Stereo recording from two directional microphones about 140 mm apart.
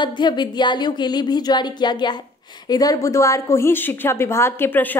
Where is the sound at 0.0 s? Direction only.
30° left (ahead or behind).